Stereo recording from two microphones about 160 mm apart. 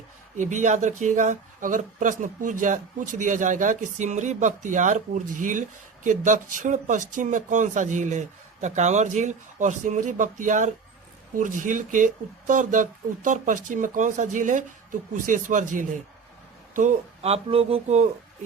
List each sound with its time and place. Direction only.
0.3 s speech: 50° right (ahead or behind)